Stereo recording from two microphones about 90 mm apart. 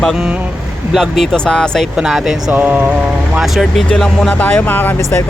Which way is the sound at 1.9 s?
5° right (ahead or behind).